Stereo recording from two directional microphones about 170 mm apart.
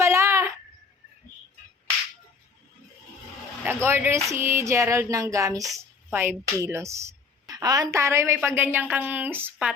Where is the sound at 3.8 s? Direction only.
15° right (ahead or behind).